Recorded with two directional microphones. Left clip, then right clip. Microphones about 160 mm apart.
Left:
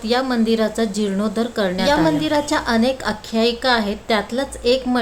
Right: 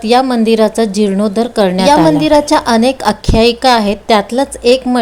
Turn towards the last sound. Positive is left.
turn(degrees=-35)  # may be behind; listen again after turning